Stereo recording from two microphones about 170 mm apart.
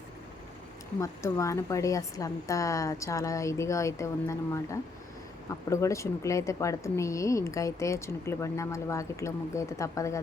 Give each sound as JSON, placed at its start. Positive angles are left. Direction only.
{"t": 0.9, "sound": "a woman's voice", "side_deg": 20}